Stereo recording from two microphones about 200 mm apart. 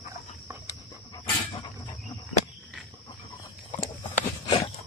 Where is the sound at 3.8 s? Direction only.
20° left (ahead or behind).